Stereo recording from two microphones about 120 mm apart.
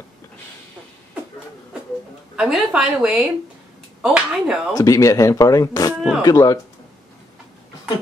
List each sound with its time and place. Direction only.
2.3 s a woman's voice: 5° right (ahead or behind)
4.7 s speech: 25° left (ahead or behind)
5.9 s speech: centre (ahead or behind)
6.2 s speech: 30° left (ahead or behind)